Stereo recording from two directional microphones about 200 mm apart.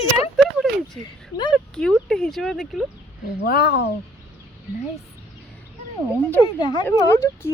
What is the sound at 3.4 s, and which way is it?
Speech, 50° left (ahead or behind).